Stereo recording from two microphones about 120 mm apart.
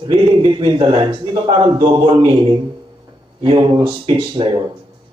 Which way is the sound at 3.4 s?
45° right (ahead or behind).